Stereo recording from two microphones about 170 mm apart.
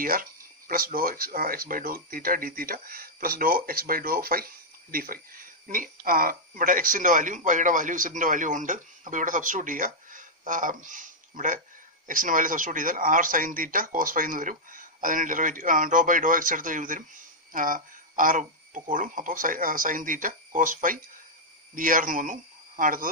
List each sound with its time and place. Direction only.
0.0 s speech: 55° right (ahead or behind)